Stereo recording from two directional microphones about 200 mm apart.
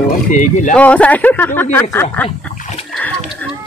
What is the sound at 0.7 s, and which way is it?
Speech, 5° left (ahead or behind).